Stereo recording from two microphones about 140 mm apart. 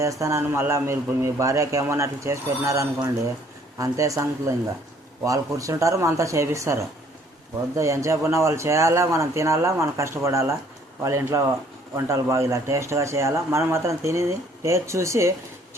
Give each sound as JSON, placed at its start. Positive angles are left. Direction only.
{"t": 0.0, "sound": "speech", "side_deg": -20}
{"t": 7.8, "sound": "speech", "side_deg": -20}